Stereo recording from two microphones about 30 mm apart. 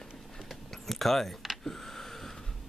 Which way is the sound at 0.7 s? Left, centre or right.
Centre.